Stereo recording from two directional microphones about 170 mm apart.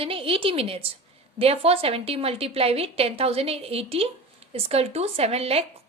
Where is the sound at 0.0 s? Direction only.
35° right (ahead or behind).